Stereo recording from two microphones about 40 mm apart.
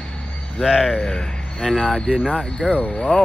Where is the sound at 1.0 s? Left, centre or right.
Centre.